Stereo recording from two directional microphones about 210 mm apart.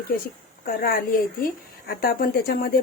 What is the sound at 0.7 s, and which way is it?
Speech, 45° left (ahead or behind).